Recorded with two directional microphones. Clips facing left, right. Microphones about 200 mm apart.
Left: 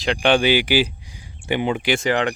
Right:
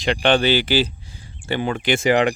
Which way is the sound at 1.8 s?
5° right (ahead or behind).